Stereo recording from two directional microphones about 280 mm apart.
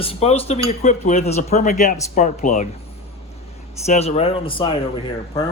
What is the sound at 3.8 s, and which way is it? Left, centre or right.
Speech, left.